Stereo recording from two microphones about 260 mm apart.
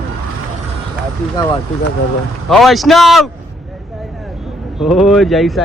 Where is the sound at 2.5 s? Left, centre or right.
Centre.